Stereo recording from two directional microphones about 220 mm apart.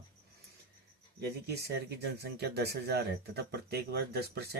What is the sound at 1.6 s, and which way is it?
A man's voice, 50° right (ahead or behind).